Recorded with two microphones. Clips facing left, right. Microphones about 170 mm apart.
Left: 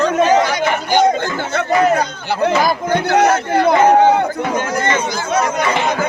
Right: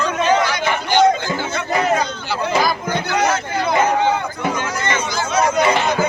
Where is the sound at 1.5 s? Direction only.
60° left (ahead or behind).